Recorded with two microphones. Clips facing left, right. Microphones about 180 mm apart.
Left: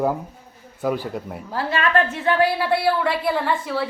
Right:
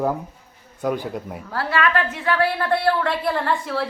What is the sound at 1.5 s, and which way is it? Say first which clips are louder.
Speech: even; 15° left (ahead or behind).